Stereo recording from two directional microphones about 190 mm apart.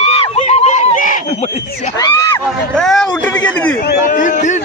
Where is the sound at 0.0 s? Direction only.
30° left (ahead or behind).